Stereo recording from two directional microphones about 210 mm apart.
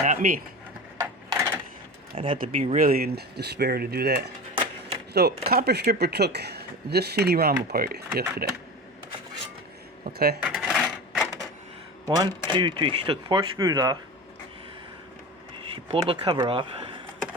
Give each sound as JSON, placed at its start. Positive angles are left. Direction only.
{"t": 0.0, "sound": "speech", "side_deg": -35}
{"t": 0.9, "sound": "a sound", "side_deg": -15}
{"t": 2.1, "sound": "speech", "side_deg": -25}
{"t": 2.7, "sound": "speech", "side_deg": -45}
{"t": 4.5, "sound": "a sound", "side_deg": -25}
{"t": 5.1, "sound": "speech", "side_deg": -50}
{"t": 10.1, "sound": "speech", "side_deg": -50}
{"t": 10.4, "sound": "coin", "side_deg": -5}
{"t": 12.0, "sound": "speech", "side_deg": -20}
{"t": 15.7, "sound": "speech", "side_deg": -25}